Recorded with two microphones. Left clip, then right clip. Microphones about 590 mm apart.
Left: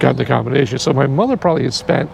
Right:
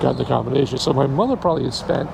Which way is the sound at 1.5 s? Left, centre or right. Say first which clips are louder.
Left 4 dB; left.